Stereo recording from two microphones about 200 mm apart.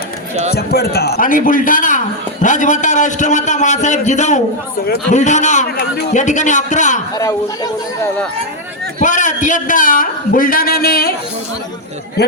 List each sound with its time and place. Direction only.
0.5 s a man's voice: 50° left (ahead or behind)
7.2 s speech: 15° left (ahead or behind)
9.0 s a man's voice: 40° left (ahead or behind)